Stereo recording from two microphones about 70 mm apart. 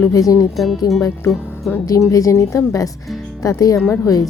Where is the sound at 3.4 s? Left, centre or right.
Left.